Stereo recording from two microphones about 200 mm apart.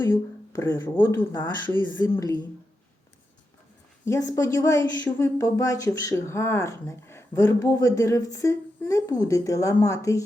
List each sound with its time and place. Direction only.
0.0 s speech: 15° left (ahead or behind)
4.0 s speech: 15° left (ahead or behind)